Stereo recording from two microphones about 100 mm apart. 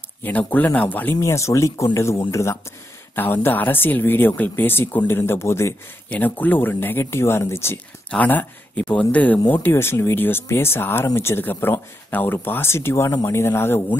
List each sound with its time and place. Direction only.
0.2 s speech: 15° left (ahead or behind)
1.1 s speech: 30° left (ahead or behind)